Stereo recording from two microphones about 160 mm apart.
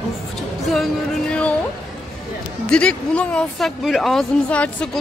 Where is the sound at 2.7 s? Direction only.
5° left (ahead or behind).